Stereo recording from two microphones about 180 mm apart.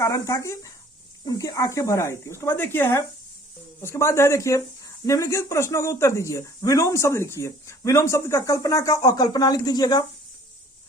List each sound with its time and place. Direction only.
0.0 s speech: 20° left (ahead or behind)